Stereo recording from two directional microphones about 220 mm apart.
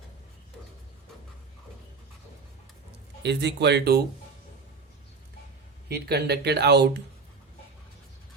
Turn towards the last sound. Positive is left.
turn(degrees=-50)  # may be behind; listen again after turning